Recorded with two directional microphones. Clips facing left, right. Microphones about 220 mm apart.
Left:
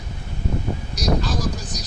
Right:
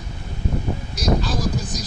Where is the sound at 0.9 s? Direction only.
Centre (ahead or behind).